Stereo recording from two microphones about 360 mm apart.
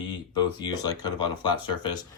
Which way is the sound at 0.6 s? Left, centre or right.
Centre.